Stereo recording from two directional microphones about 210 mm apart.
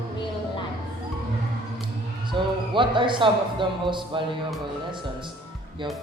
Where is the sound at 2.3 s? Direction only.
25° right (ahead or behind).